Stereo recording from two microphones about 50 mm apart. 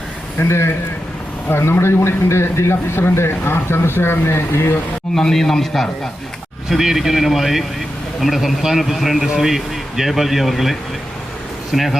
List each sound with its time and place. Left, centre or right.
0.4 s a man's voice: left
5.1 s a man's voice: centre
6.7 s a man's voice: centre